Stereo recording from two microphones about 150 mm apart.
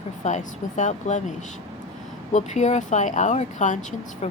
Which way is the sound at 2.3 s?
55° left (ahead or behind).